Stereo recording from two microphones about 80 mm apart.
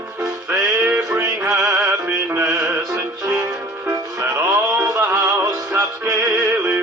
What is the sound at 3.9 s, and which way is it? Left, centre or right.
Music, right.